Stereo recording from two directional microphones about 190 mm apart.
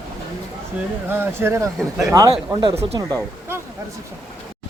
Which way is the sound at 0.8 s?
10° right (ahead or behind).